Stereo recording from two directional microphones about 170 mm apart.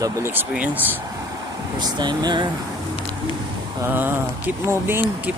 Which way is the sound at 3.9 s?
10° right (ahead or behind).